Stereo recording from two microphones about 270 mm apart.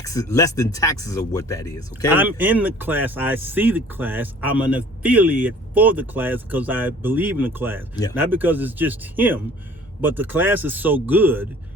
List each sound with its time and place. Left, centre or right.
0.0 s speech: centre
2.1 s speech: centre